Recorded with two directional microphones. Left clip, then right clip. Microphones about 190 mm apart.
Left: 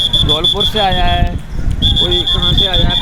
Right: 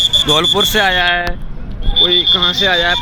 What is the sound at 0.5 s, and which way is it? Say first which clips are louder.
Speech: right 1 dB; 15° right (ahead or behind).